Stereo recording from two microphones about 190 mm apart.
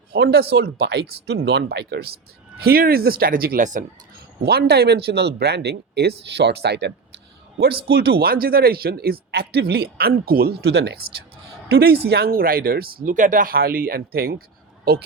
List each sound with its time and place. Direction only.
0.1 s speech: 60° right (ahead or behind)
2.6 s speech: 50° right (ahead or behind)
4.4 s speech: 55° right (ahead or behind)